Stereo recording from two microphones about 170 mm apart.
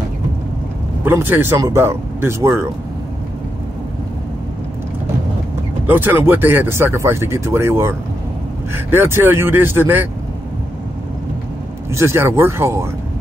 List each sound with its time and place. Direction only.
1.0 s speech: 15° right (ahead or behind)
5.9 s speech: 10° right (ahead or behind)
11.9 s speech: 15° right (ahead or behind)